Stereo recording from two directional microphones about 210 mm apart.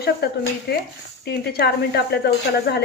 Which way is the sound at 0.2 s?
50° left (ahead or behind).